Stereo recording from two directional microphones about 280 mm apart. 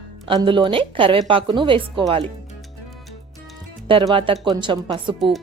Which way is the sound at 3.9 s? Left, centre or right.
Centre.